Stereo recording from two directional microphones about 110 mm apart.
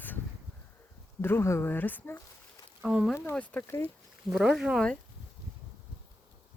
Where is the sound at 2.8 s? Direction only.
10° right (ahead or behind).